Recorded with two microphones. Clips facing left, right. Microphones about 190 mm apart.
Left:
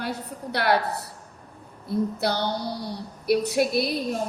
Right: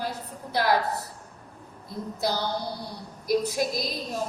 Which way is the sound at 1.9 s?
65° left (ahead or behind).